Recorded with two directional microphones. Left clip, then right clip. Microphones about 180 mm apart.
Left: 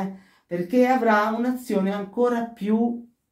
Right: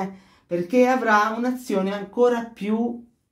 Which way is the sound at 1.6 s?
30° right (ahead or behind).